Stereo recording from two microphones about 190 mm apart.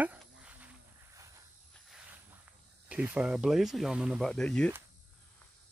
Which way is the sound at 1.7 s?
Centre (ahead or behind).